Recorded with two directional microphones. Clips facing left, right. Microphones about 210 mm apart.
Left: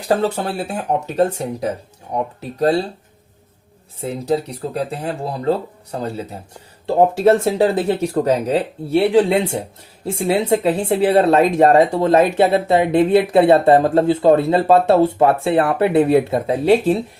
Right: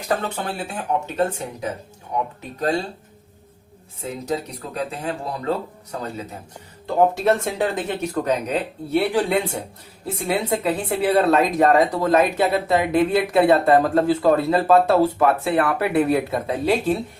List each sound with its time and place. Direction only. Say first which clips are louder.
0.1 s speech: left 6 dB; 35° left (ahead or behind)
4.0 s speech: left 6 dB; 30° left (ahead or behind)